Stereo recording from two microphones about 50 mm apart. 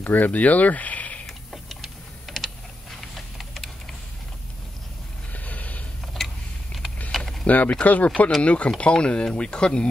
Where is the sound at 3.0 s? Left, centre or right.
Centre.